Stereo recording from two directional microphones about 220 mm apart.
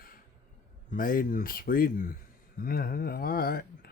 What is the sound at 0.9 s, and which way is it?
Speech, 40° left (ahead or behind).